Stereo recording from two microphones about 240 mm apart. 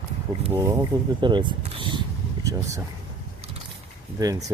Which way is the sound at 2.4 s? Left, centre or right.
Centre.